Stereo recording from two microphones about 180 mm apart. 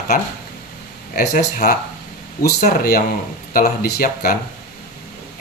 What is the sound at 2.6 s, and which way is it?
Speech, 55° left (ahead or behind).